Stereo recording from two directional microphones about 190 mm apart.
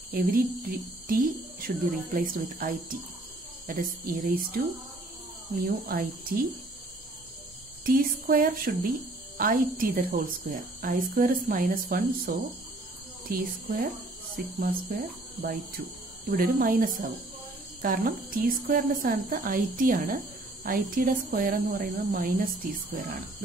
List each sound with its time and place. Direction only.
0.1 s a woman's voice: 50° right (ahead or behind)
5.6 s a woman's voice: 50° right (ahead or behind)
7.8 s a woman's voice: 50° right (ahead or behind)
16.3 s a woman's voice: 45° right (ahead or behind)